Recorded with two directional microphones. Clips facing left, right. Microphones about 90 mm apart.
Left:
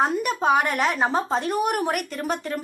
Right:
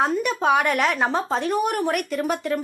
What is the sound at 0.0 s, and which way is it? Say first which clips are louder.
Speech: right 1 dB; centre (ahead or behind).